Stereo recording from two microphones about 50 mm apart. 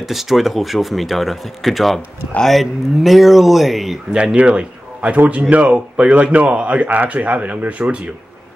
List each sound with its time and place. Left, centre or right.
0.0 s speech: centre
4.1 s speech: centre